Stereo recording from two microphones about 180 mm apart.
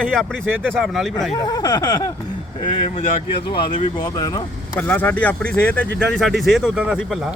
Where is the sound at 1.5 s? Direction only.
20° left (ahead or behind).